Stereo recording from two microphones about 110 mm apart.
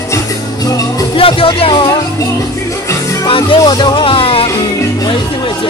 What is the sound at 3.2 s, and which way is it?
Music, 55° left (ahead or behind).